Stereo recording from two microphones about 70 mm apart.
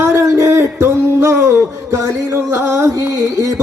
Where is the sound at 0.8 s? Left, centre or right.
Right.